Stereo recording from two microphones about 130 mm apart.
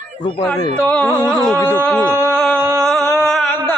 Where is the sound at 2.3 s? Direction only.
5° left (ahead or behind).